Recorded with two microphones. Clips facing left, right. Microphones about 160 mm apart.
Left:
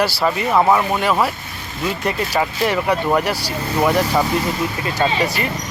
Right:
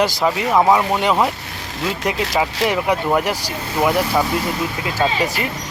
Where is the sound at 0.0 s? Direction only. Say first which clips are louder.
Right 1 dB; 15° right (ahead or behind).